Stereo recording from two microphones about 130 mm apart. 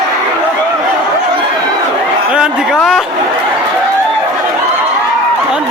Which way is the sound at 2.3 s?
5° right (ahead or behind).